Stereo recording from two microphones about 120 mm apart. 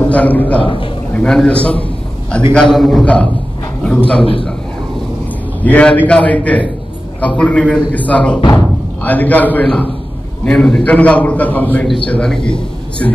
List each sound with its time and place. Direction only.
0.1 s a man's voice: 15° left (ahead or behind)
0.6 s a man's voice: 45° left (ahead or behind)
1.1 s a man's voice: 5° left (ahead or behind)
4.2 s a man's voice: 45° left (ahead or behind)
5.6 s a man's voice: 10° left (ahead or behind)
8.4 s speech: 35° left (ahead or behind)
9.0 s a man's voice: 15° left (ahead or behind)